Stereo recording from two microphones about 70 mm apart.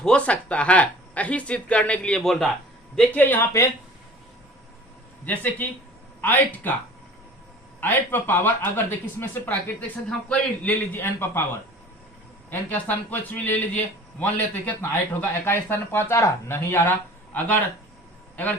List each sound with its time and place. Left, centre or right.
0.0 s speech: centre
2.2 s speech: centre
2.9 s speech: centre
3.2 s a man's voice: left
5.2 s a man's voice: left
7.8 s a man's voice: left
10.2 s a man's voice: centre
10.9 s a man's voice: left
12.5 s a man's voice: left